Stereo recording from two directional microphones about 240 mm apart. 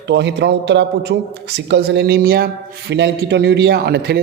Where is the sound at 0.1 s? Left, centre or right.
Right.